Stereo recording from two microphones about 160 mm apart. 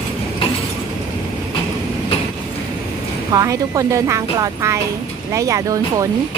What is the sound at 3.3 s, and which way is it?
Speech, 20° right (ahead or behind).